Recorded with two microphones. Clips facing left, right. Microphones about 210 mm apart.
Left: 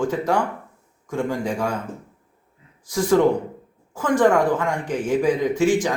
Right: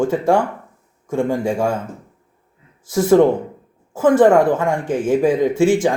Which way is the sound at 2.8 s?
25° right (ahead or behind).